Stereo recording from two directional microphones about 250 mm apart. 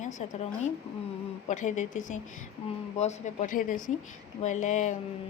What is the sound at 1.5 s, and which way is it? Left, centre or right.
A woman's voice, left.